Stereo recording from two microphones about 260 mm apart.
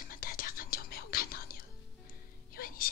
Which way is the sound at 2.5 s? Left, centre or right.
Left.